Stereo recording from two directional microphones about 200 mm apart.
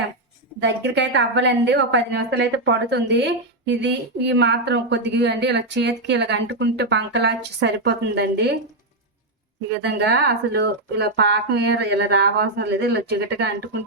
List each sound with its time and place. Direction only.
0.6 s a woman's voice: 60° right (ahead or behind)
9.8 s a woman's voice: 55° right (ahead or behind)